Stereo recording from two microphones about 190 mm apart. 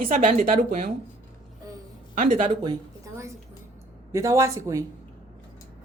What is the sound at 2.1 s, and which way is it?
Speech, 45° right (ahead or behind).